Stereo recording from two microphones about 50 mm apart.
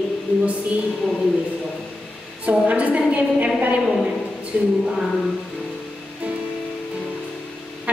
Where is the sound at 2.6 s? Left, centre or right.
Right.